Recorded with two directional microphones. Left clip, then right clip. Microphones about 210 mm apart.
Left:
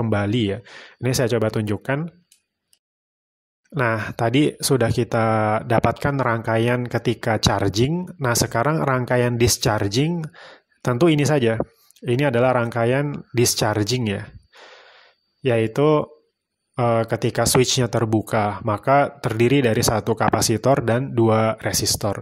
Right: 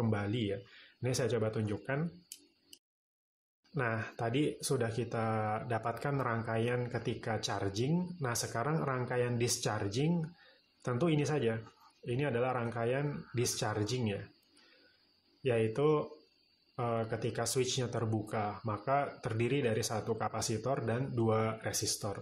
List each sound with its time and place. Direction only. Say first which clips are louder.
0.0 s speech: left 14 dB; 45° left (ahead or behind)
3.7 s speech: left 14 dB; 45° left (ahead or behind)
15.4 s speech: left 12 dB; 45° left (ahead or behind)